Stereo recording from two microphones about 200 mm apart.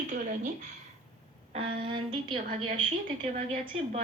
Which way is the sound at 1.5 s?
30° right (ahead or behind).